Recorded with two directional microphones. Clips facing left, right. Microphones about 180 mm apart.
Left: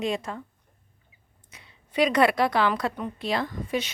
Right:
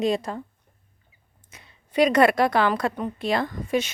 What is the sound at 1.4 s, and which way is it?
A woman's voice, 45° right (ahead or behind).